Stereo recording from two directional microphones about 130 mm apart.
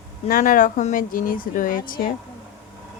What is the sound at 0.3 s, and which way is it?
Speech, 90° left.